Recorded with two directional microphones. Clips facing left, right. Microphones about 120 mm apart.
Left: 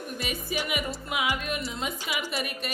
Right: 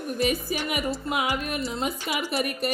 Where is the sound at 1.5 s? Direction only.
30° right (ahead or behind).